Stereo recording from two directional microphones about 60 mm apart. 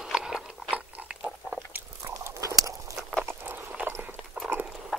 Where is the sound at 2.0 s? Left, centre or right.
Right.